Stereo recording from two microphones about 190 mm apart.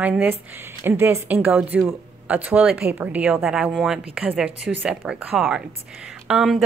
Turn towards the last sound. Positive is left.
turn(degrees=0)  # may be behind; listen again after turning